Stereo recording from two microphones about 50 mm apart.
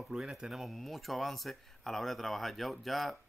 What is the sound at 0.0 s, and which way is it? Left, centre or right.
Speech, centre.